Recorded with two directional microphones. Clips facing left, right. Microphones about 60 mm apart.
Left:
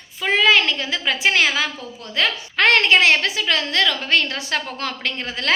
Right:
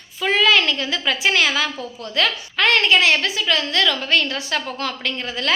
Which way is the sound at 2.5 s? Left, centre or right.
Left.